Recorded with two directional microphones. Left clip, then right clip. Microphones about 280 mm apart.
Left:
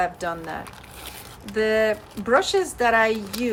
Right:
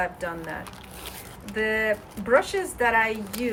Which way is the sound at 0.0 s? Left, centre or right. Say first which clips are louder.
Left 4 dB; centre.